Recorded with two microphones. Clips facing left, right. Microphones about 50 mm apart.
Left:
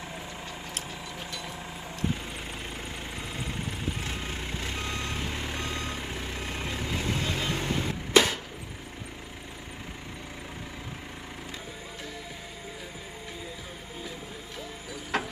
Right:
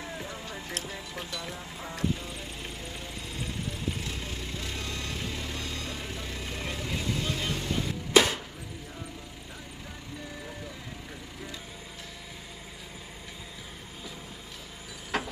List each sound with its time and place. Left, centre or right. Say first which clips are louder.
4.0 s vehicle: left 2 dB; left
8.1 s a sound: even; centre
15.1 s ratchet: left 1 dB; centre